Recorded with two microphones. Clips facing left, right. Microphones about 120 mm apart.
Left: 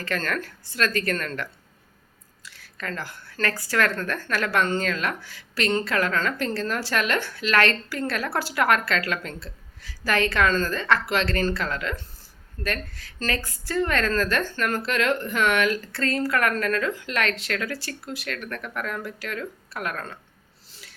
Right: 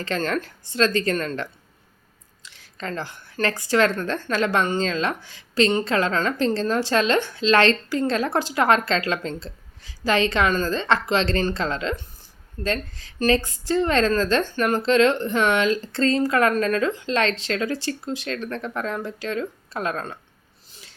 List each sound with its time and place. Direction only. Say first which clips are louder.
0.0 s a woman's voice: right 3 dB; 20° right (ahead or behind)